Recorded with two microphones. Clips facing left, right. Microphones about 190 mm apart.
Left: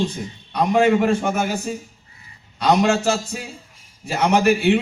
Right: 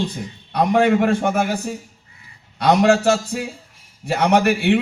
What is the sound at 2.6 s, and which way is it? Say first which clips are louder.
A man's voice: right 2 dB; 65° right (ahead or behind).